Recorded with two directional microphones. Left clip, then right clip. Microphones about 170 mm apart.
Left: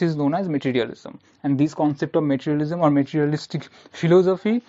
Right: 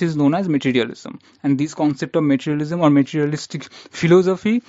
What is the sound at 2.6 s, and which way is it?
Speech, 60° right (ahead or behind).